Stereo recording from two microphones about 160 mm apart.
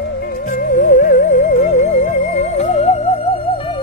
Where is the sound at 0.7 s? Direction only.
55° left (ahead or behind).